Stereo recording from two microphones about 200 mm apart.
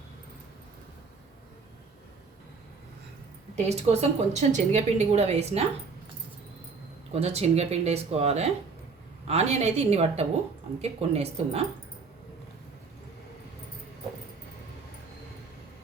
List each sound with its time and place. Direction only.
3.5 s a woman's voice: 35° right (ahead or behind)
7.1 s a woman's voice: 30° right (ahead or behind)